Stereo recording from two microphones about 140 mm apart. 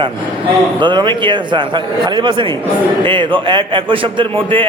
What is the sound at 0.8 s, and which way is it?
A man's voice, 35° right (ahead or behind).